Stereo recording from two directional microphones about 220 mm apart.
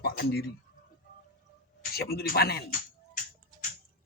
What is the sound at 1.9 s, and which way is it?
Speech, 45° left (ahead or behind).